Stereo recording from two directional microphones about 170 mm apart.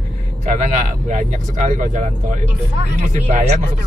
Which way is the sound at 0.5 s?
45° right (ahead or behind).